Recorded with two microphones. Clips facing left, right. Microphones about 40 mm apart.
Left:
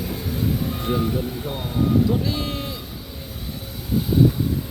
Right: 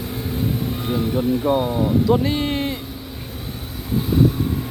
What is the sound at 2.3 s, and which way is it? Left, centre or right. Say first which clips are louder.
Speech: right 5 dB; right.